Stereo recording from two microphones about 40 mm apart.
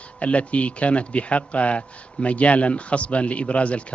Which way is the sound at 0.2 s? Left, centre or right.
Left.